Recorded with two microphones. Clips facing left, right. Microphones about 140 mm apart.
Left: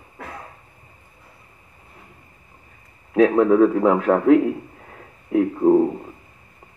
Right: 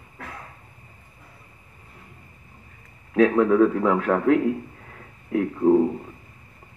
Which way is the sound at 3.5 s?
15° left (ahead or behind).